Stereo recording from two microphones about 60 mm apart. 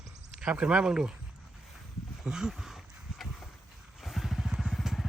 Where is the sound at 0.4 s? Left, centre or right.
Centre.